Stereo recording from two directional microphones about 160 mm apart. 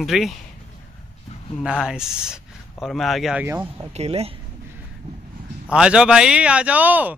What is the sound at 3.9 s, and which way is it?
Speech, 40° right (ahead or behind).